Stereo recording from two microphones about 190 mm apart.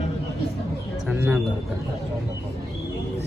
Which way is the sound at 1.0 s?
10° right (ahead or behind).